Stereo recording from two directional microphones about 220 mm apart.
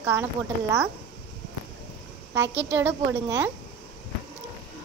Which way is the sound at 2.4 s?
55° right (ahead or behind).